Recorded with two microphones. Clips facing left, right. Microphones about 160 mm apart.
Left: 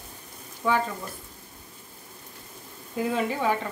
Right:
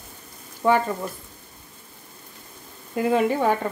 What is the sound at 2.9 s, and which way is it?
Frying, 55° right (ahead or behind).